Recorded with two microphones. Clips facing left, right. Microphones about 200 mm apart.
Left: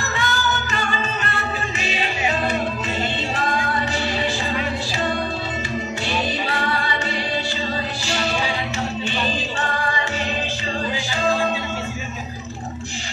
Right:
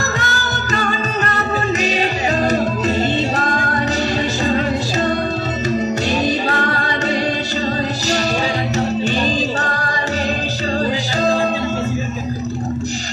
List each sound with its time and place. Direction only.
0.2 s music: 40° right (ahead or behind)
6.5 s music: 45° right (ahead or behind)
8.7 s music: 40° right (ahead or behind)